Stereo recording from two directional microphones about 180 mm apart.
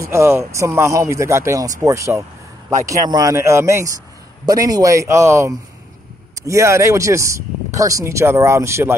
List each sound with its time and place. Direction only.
0.0 s speech: 15° right (ahead or behind)